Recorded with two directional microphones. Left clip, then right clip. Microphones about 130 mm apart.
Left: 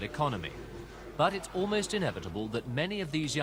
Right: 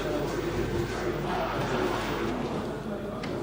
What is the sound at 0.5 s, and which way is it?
A man's voice, 30° right (ahead or behind).